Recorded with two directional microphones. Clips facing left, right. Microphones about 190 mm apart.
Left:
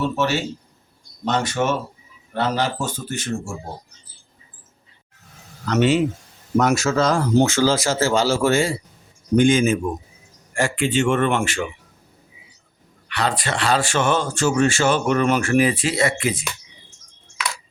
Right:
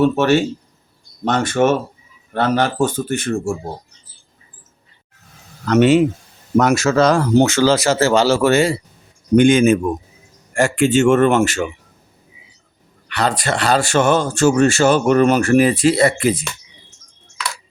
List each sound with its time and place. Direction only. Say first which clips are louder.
0.0 s a man's voice: right 8 dB; 55° right (ahead or behind)
5.6 s a man's voice: right 6 dB; 50° right (ahead or behind)
6.6 s a man's voice: right 4 dB; 70° right (ahead or behind)
10.5 s a man's voice: right 6 dB; 45° right (ahead or behind)
13.1 s speech: right 4 dB; 40° right (ahead or behind)